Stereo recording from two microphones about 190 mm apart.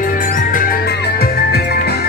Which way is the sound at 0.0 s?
45° left (ahead or behind).